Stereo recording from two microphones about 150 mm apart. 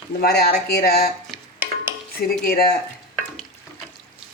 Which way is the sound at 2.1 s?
90° left.